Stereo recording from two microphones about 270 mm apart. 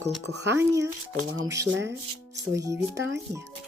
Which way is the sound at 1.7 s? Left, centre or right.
Right.